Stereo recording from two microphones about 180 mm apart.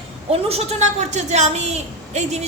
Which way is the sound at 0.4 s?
35° right (ahead or behind).